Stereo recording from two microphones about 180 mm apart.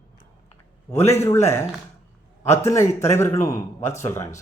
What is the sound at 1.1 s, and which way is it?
Speech, 15° left (ahead or behind).